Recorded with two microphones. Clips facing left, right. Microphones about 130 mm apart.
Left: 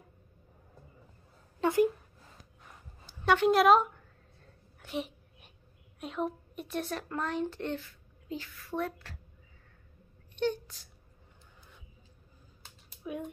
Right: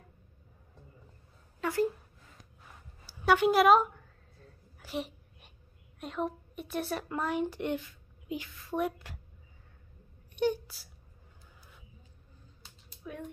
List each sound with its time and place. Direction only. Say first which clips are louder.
1.6 s a woman's voice: left 4 dB; 20° left (ahead or behind)
3.1 s a woman's voice: even; 5° right (ahead or behind)
4.7 s a sound: even; centre (ahead or behind)
5.9 s a child's voice: even; centre (ahead or behind)
10.3 s speech: right 2 dB; 10° right (ahead or behind)
13.0 s speech: left 5 dB; 15° left (ahead or behind)